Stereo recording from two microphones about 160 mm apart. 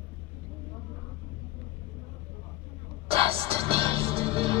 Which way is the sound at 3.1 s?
35° right (ahead or behind).